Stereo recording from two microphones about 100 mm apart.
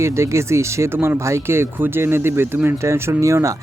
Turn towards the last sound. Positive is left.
turn(degrees=-30)  # may be behind; listen again after turning